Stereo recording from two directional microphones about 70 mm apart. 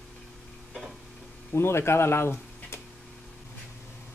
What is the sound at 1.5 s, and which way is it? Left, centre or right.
Speech, left.